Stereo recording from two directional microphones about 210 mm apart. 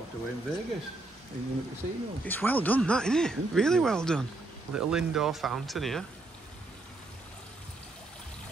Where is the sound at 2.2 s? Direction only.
10° left (ahead or behind).